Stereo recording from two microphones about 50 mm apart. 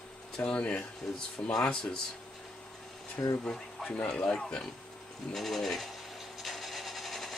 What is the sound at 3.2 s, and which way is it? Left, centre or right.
Speech, left.